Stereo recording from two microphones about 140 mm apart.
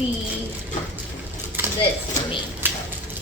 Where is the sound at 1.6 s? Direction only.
15° right (ahead or behind).